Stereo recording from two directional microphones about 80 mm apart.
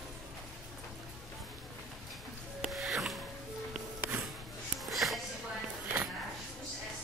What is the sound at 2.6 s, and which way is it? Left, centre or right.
Music, centre.